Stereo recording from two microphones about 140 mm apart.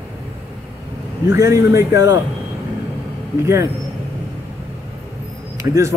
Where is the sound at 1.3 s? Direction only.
20° right (ahead or behind).